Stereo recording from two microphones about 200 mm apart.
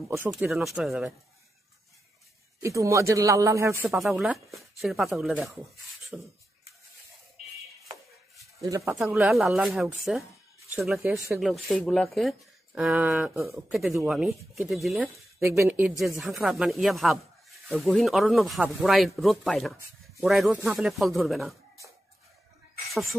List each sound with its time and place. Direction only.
0.3 s speech: centre (ahead or behind)
2.6 s a man's voice: 15° right (ahead or behind)
3.8 s speech: 5° right (ahead or behind)
8.6 s a man's voice: 15° right (ahead or behind)
8.9 s speech: centre (ahead or behind)
15.4 s a man's voice: 15° right (ahead or behind)
16.2 s speech: centre (ahead or behind)